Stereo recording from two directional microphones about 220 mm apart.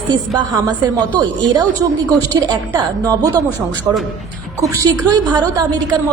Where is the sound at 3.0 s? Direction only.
15° right (ahead or behind).